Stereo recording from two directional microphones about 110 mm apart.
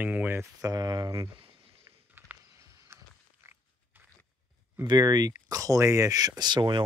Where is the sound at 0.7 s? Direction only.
35° right (ahead or behind).